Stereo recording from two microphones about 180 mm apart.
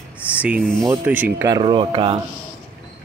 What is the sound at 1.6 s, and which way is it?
Speech, 30° right (ahead or behind).